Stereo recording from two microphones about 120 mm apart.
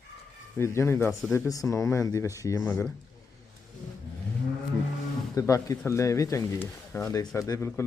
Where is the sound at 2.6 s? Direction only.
15° left (ahead or behind).